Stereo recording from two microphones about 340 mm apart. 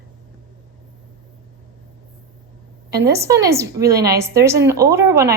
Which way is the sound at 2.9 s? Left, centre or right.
Centre.